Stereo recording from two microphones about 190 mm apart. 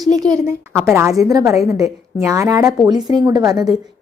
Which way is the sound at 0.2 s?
15° right (ahead or behind).